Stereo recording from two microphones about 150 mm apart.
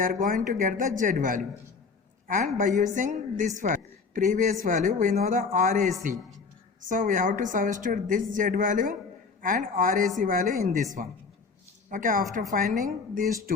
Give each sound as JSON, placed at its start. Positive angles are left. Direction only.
{"t": 0.0, "sound": "a woman's voice", "side_deg": -60}